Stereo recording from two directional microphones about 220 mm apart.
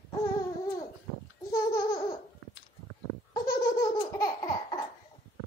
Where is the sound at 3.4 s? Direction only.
40° left (ahead or behind).